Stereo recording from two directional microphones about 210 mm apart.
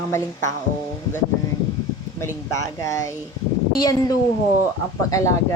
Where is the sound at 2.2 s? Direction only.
15° left (ahead or behind).